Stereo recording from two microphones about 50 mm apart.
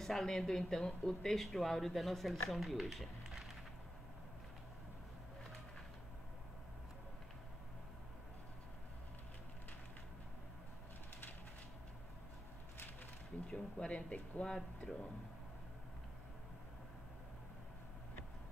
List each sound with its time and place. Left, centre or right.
0.0 s speech: centre
13.5 s a sound: centre
14.4 s speech: centre